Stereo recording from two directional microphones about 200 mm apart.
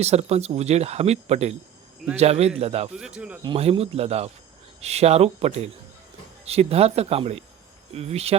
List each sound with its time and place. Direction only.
0.0 s speech: 30° right (ahead or behind)
2.9 s speech: 5° right (ahead or behind)
3.4 s speech: 30° right (ahead or behind)